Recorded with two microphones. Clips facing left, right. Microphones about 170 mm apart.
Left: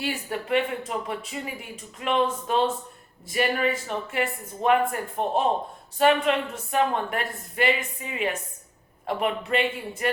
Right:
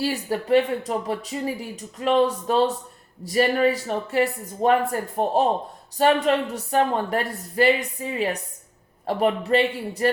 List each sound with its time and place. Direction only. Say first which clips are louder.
0.0 s speech: right 5 dB; 35° right (ahead or behind)